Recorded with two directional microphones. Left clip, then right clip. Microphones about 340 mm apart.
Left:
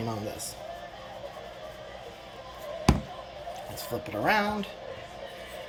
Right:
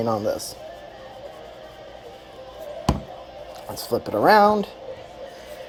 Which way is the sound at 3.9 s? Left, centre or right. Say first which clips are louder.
Right 10 dB; centre.